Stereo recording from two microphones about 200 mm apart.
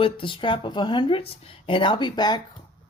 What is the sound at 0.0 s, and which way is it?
Speech, 25° left (ahead or behind).